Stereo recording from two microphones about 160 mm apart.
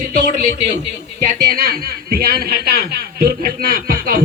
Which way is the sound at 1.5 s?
65° right (ahead or behind).